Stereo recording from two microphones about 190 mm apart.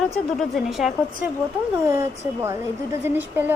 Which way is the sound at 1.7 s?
15° right (ahead or behind).